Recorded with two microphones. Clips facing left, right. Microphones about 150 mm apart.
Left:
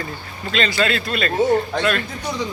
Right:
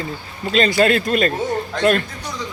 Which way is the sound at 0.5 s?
45° right (ahead or behind).